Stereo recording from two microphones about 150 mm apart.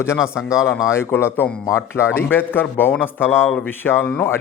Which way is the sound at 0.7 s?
20° left (ahead or behind).